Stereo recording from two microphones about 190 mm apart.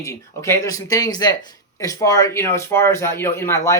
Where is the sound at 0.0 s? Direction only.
15° left (ahead or behind).